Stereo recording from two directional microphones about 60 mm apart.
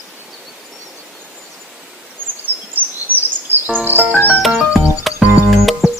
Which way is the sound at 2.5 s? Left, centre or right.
Left.